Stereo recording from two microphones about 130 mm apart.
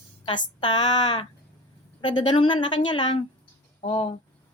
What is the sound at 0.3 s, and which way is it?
A woman's voice, 35° left (ahead or behind).